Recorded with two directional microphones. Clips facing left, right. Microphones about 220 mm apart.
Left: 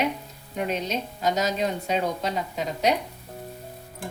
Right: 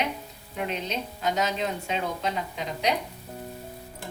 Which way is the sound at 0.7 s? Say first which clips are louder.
Left 4 dB; 40° left (ahead or behind).